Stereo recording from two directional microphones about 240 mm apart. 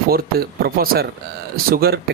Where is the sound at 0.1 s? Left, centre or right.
Right.